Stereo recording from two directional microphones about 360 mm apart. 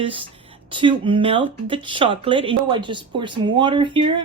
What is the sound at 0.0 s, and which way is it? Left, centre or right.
Speech, centre.